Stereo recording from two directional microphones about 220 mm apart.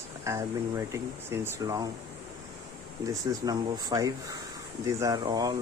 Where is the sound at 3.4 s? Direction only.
15° right (ahead or behind).